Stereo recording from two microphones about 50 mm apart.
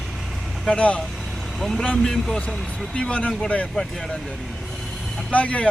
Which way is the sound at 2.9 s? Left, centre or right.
Left.